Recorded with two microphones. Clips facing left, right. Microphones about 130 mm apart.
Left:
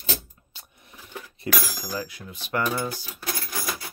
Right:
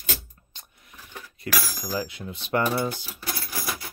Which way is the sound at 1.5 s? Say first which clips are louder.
Left 1 dB; 20° left (ahead or behind).